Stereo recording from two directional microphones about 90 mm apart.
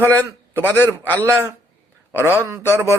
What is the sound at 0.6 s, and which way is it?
Speech, 25° left (ahead or behind).